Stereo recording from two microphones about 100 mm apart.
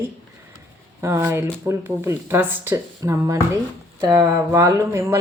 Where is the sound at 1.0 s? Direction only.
25° right (ahead or behind).